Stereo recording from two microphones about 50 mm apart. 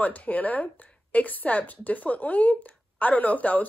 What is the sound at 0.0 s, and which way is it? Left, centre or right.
Speech, left.